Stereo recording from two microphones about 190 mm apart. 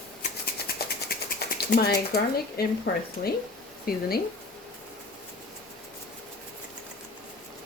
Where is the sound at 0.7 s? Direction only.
50° left (ahead or behind).